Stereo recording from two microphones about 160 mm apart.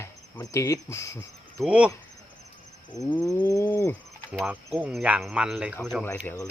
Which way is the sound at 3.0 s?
20° left (ahead or behind).